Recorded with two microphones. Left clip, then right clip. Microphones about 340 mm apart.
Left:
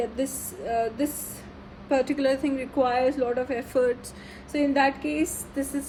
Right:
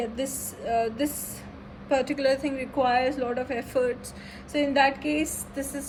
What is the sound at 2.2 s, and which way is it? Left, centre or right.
Speech, left.